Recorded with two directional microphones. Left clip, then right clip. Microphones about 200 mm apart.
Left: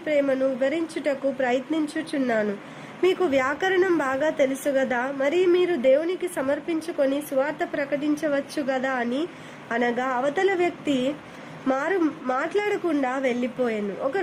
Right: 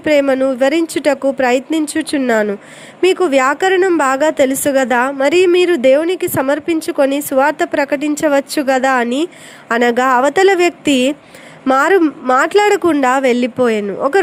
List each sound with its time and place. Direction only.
0.0 s a woman's voice: 35° right (ahead or behind)